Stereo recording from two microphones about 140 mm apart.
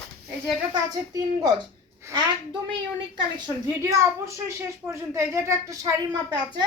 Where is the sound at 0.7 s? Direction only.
25° right (ahead or behind).